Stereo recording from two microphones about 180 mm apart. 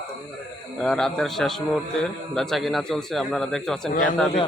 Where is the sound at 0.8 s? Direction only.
5° left (ahead or behind).